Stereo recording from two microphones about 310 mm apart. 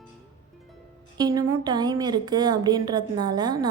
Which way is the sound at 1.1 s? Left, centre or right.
Centre.